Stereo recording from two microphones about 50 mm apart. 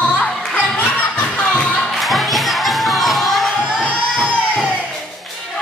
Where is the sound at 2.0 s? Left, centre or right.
Centre.